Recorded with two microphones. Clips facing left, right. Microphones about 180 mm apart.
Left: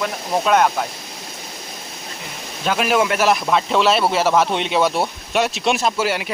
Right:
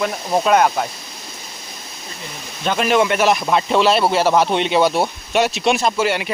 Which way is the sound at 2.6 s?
5° left (ahead or behind).